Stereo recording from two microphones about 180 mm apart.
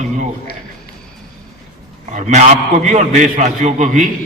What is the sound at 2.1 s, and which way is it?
A man's voice, 40° right (ahead or behind).